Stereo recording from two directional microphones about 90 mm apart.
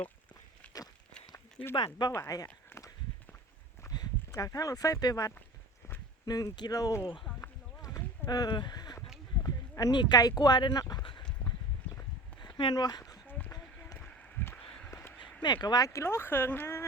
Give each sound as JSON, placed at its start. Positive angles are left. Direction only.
{"t": 1.7, "sound": "speech", "side_deg": 55}
{"t": 2.1, "sound": "speech", "side_deg": 40}
{"t": 2.7, "sound": "walk", "side_deg": 25}
{"t": 3.8, "sound": "speech", "side_deg": 45}
{"t": 7.8, "sound": "a sound", "side_deg": 35}
{"t": 8.3, "sound": "speech", "side_deg": 50}
{"t": 9.4, "sound": "a sound", "side_deg": 40}
{"t": 9.9, "sound": "speech", "side_deg": 55}
{"t": 11.4, "sound": "clip-clop", "side_deg": 30}
{"t": 12.7, "sound": "speech", "side_deg": 50}
{"t": 13.5, "sound": "a sound", "side_deg": 45}
{"t": 14.0, "sound": "a sound", "side_deg": 15}
{"t": 15.2, "sound": "speech", "side_deg": 55}
{"t": 15.9, "sound": "speech", "side_deg": 30}